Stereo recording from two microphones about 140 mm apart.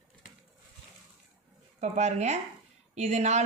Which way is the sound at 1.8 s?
55° right (ahead or behind).